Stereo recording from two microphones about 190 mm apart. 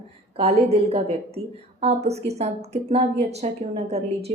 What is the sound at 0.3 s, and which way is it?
A woman's voice, 30° right (ahead or behind).